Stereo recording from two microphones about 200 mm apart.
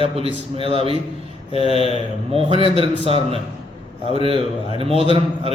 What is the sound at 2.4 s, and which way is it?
Speech, 25° right (ahead or behind).